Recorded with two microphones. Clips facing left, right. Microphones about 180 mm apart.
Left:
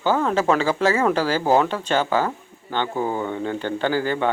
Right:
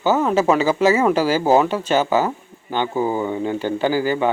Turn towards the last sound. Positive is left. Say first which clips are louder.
# right 3 dB
turn(degrees=-5)  # may be behind; listen again after turning